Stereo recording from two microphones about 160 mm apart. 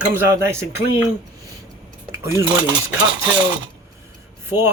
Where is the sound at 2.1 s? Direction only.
15° right (ahead or behind).